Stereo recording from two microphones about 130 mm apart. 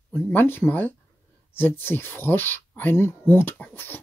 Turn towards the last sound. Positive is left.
turn(degrees=15)  # may be behind; listen again after turning